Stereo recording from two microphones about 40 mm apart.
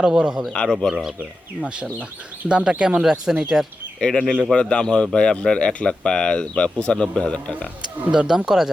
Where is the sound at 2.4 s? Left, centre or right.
Right.